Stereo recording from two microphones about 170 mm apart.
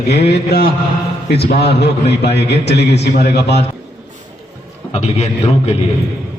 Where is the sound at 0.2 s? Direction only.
70° left (ahead or behind).